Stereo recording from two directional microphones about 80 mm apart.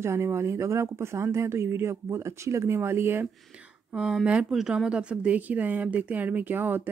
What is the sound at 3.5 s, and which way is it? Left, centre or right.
A woman's voice, centre.